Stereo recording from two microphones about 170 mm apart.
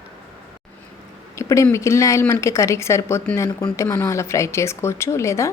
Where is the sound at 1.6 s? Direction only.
15° left (ahead or behind).